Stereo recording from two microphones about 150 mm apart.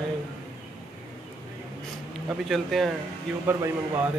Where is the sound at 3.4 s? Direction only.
15° right (ahead or behind).